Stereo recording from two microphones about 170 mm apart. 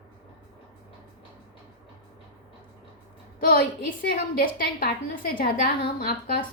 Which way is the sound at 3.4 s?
60° left (ahead or behind).